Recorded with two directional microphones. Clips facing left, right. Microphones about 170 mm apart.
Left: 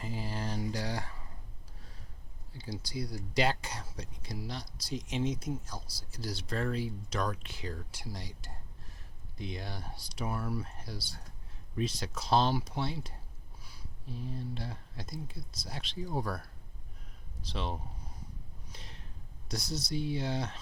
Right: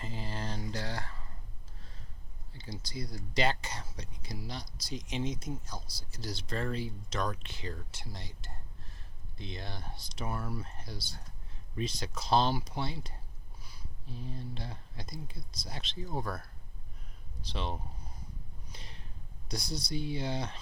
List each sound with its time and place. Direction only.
0.0 s speech: 5° left (ahead or behind)
2.5 s speech: 5° left (ahead or behind)
17.5 s speech: centre (ahead or behind)
18.7 s a sound: centre (ahead or behind)
19.5 s speech: centre (ahead or behind)